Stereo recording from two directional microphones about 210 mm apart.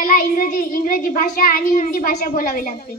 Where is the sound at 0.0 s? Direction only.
40° left (ahead or behind).